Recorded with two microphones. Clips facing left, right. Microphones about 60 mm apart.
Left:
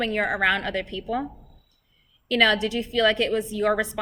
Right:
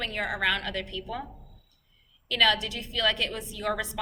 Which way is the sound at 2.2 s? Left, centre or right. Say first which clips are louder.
Left 4 dB; left.